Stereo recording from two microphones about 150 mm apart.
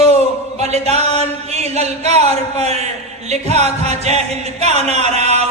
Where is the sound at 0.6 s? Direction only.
45° right (ahead or behind).